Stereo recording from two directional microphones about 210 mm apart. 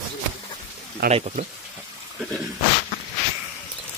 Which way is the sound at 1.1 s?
30° right (ahead or behind).